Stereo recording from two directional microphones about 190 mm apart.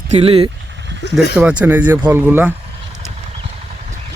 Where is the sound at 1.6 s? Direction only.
10° right (ahead or behind).